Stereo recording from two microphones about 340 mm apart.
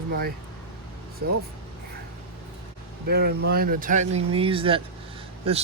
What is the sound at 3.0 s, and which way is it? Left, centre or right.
Speech, right.